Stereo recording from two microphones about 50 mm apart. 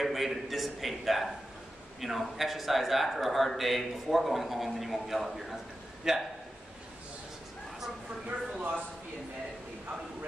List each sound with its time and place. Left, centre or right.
0.0 s a man's voice: centre
8.3 s speech: right